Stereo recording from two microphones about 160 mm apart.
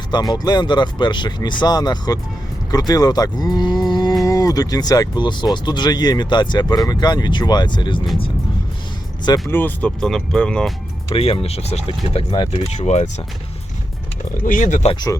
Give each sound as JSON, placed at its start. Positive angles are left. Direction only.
{"t": 0.1, "sound": "speech", "side_deg": 25}
{"t": 9.5, "sound": "speech", "side_deg": 10}
{"t": 11.1, "sound": "speech", "side_deg": 35}
{"t": 12.5, "sound": "speech", "side_deg": 45}
{"t": 14.4, "sound": "speech", "side_deg": 55}